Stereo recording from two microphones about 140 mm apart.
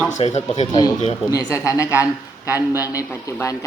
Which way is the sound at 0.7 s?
30° left (ahead or behind).